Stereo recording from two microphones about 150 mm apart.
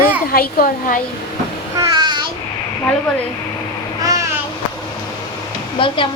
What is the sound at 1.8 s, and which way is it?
Babbling, 25° right (ahead or behind).